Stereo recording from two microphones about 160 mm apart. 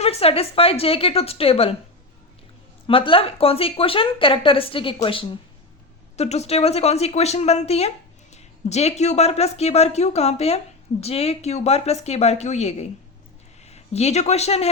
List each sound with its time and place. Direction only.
0.0 s speech: 40° left (ahead or behind)
2.8 s speech: 35° left (ahead or behind)